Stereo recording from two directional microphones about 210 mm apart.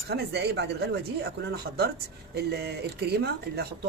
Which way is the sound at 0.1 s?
50° right (ahead or behind).